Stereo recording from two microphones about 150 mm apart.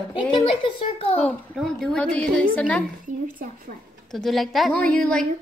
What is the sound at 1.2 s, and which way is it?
A woman's voice, 5° left (ahead or behind).